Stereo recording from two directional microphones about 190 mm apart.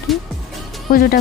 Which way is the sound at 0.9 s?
50° left (ahead or behind).